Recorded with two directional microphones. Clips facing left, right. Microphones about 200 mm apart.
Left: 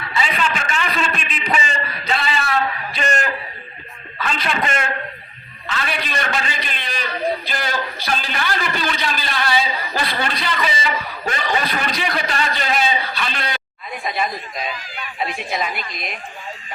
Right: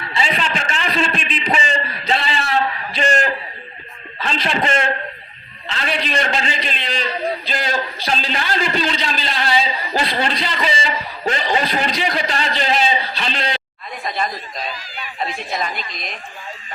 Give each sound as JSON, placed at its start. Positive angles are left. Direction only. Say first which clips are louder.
{"t": 0.1, "sound": "a sound", "louder": "even", "side_deg": -30}
{"t": 4.2, "sound": "a man's voice", "louder": "right 2 dB", "side_deg": -30}
{"t": 14.0, "sound": "a woman's voice", "louder": "even", "side_deg": 5}